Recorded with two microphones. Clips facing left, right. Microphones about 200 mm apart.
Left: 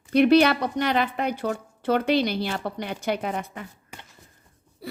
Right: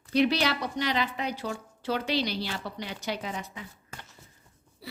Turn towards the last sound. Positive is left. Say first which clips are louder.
# left 7 dB
turn(degrees=50)  # may be behind; listen again after turning